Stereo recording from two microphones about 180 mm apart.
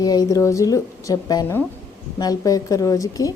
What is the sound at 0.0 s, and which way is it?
A woman's voice, 20° left (ahead or behind).